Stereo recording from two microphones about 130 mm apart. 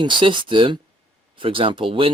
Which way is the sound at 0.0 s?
40° right (ahead or behind).